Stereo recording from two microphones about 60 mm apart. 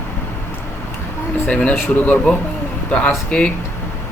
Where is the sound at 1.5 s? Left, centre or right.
Centre.